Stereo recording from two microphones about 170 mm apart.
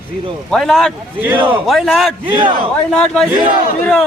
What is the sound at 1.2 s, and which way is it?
Speech, 10° right (ahead or behind).